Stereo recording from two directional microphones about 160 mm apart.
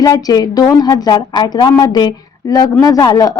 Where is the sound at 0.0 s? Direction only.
25° left (ahead or behind).